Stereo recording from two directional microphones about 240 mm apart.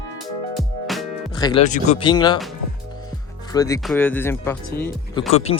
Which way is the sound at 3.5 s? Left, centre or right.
Centre.